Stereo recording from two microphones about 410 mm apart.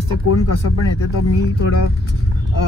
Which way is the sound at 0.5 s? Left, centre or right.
Left.